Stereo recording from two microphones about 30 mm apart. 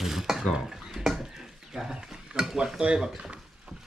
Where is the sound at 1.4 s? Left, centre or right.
Centre.